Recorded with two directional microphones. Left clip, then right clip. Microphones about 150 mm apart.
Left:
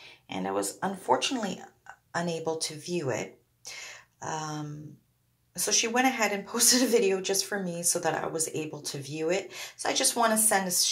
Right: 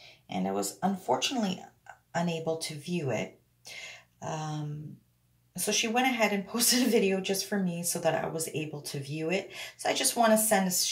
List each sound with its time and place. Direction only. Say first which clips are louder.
0.3 s a woman's voice: left 1 dB; 15° left (ahead or behind)